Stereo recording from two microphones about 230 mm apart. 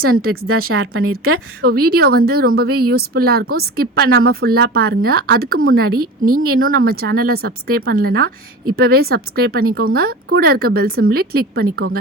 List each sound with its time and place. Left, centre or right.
0.0 s speech: right
1.6 s speech: right